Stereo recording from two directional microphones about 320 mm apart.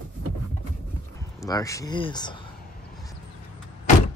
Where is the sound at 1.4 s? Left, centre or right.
Centre.